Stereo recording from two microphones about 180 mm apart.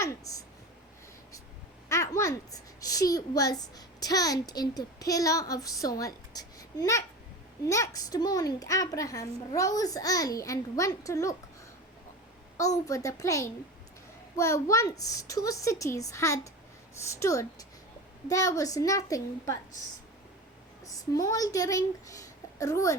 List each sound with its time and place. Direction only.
0.0 s a sound: 20° left (ahead or behind)
1.9 s a child's voice: 15° left (ahead or behind)
12.5 s a woman's voice: 20° left (ahead or behind)
20.8 s speech: 20° left (ahead or behind)